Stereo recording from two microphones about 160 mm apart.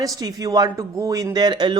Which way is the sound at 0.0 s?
25° right (ahead or behind).